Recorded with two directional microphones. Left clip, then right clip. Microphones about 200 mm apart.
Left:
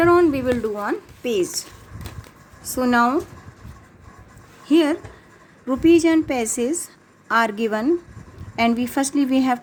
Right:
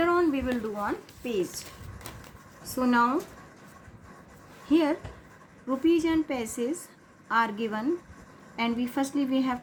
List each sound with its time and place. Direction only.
0.0 s a sound: 55° left (ahead or behind)
0.8 s speech: 55° left (ahead or behind)
2.7 s a woman's voice: 55° left (ahead or behind)
4.6 s a woman's voice: 55° left (ahead or behind)